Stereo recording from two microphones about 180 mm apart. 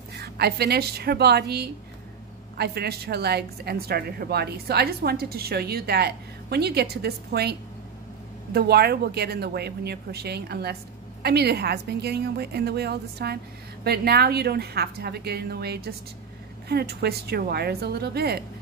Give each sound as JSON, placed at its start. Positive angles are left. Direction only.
{"t": 0.1, "sound": "a woman's voice", "side_deg": -60}
{"t": 8.5, "sound": "a woman's voice", "side_deg": -60}